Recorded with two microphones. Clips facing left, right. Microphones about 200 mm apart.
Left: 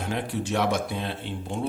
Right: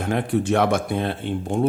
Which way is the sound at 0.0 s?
55° right (ahead or behind).